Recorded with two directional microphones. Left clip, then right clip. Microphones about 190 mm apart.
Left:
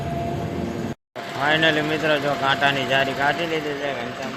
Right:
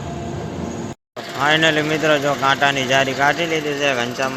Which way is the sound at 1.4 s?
15° right (ahead or behind).